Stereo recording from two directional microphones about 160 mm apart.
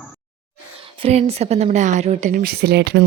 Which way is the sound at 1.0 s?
40° right (ahead or behind).